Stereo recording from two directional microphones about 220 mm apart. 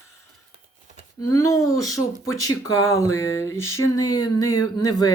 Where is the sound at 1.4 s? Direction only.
15° left (ahead or behind).